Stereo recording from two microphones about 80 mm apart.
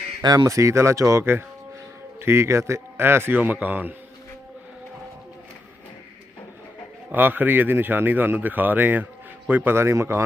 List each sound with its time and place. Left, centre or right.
0.2 s speech: right
0.4 s speech: right
1.2 s speech: right
7.1 s speech: right